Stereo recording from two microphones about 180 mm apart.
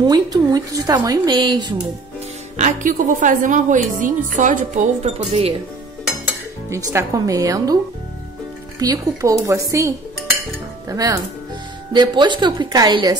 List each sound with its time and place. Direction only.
0.0 s a woman's voice: 20° right (ahead or behind)
2.5 s a woman's voice: 45° right (ahead or behind)
6.2 s a woman's voice: 15° right (ahead or behind)